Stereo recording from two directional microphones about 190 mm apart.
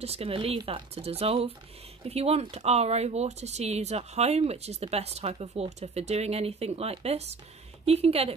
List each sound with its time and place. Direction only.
0.0 s speech: 30° right (ahead or behind)